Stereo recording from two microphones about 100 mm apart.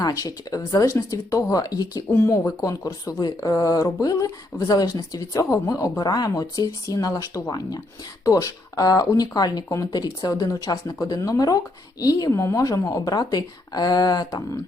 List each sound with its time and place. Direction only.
0.0 s speech: 40° left (ahead or behind)
2.1 s speech: 25° left (ahead or behind)
2.6 s speech: 35° left (ahead or behind)